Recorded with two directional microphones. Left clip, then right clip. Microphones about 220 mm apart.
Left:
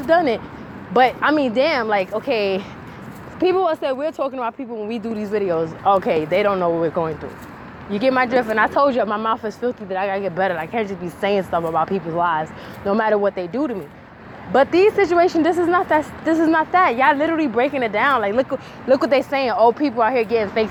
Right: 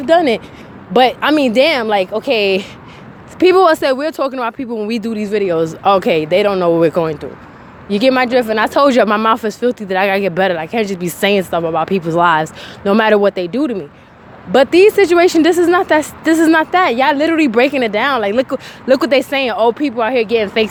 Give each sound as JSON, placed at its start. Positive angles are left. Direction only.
{"t": 0.1, "sound": "speech", "side_deg": -45}